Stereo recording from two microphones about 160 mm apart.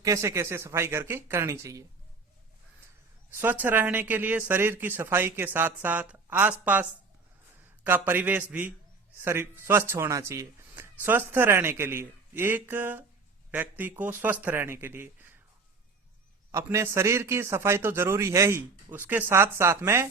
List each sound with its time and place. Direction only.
0.0 s speech: 20° right (ahead or behind)
3.3 s speech: 10° right (ahead or behind)
7.9 s speech: 10° right (ahead or behind)
16.5 s speech: 15° right (ahead or behind)